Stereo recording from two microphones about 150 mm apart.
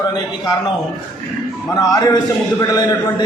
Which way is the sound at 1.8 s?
25° left (ahead or behind).